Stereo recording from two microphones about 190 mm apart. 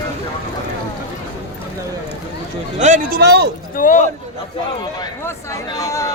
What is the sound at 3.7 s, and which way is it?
Speech, 45° left (ahead or behind).